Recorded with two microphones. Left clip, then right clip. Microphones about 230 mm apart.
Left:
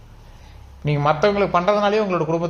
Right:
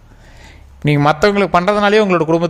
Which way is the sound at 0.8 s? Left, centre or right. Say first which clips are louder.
Right 5 dB; right.